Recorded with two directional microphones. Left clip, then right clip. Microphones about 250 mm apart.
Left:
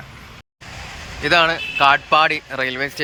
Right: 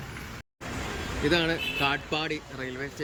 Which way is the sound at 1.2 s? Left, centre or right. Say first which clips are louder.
Left 10 dB; centre.